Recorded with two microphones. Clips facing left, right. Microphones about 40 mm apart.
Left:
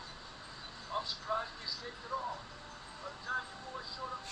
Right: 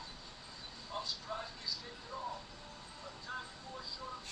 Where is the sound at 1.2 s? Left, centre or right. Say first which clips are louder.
Left 6 dB; centre.